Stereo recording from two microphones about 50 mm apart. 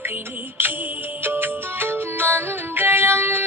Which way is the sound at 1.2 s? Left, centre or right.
Right.